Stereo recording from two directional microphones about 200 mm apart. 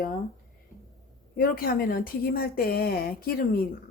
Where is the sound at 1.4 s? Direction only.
50° left (ahead or behind).